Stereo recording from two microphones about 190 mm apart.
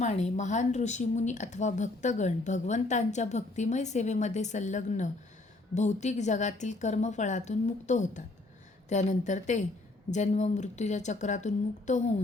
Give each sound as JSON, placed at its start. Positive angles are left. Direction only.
{"t": 0.0, "sound": "speech", "side_deg": 40}